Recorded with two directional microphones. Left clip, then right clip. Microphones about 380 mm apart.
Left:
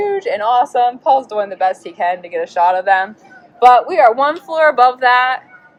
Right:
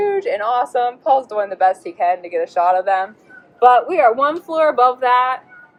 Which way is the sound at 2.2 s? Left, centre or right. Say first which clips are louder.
Even; left.